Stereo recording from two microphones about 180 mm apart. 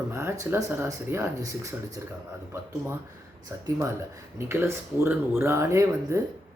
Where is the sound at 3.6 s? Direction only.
20° right (ahead or behind).